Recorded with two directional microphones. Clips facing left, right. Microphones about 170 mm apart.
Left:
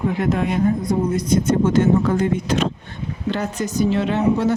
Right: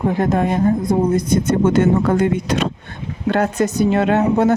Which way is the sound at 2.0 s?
65° right (ahead or behind).